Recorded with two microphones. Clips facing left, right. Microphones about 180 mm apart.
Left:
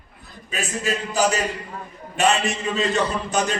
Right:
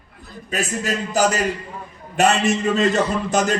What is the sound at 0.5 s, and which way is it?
A man's voice, 40° right (ahead or behind).